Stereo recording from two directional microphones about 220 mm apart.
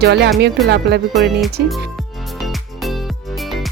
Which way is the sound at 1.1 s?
Centre (ahead or behind).